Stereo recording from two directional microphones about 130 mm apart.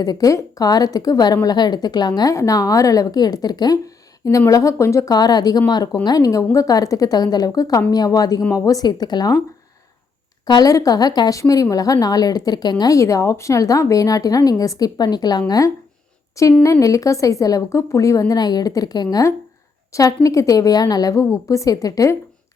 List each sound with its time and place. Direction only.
0.0 s a woman's voice: 30° left (ahead or behind)
10.4 s a woman's voice: 30° left (ahead or behind)